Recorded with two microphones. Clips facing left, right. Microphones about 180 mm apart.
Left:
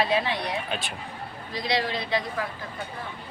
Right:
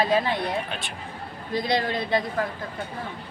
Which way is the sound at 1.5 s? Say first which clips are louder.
Right 3 dB; 50° right (ahead or behind).